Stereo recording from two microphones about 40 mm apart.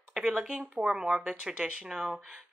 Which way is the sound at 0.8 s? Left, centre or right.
Centre.